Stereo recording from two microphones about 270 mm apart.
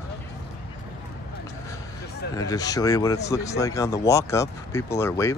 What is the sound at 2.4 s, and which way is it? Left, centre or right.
Speech, centre.